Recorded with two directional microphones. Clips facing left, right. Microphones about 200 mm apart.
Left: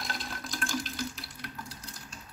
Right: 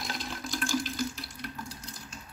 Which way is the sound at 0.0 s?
Centre (ahead or behind).